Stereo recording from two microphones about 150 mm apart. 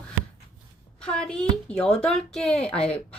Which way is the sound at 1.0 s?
5° left (ahead or behind).